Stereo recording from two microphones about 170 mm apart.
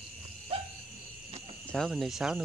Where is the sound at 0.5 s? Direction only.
35° right (ahead or behind).